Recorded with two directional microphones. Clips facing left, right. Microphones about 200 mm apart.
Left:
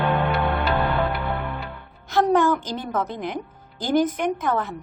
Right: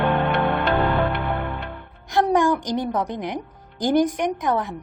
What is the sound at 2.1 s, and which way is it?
A woman's voice, 15° right (ahead or behind).